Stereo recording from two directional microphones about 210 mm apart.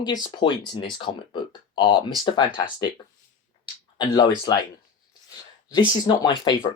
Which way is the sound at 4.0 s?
20° left (ahead or behind).